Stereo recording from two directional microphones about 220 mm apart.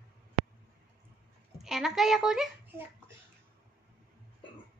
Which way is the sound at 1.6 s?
Centre (ahead or behind).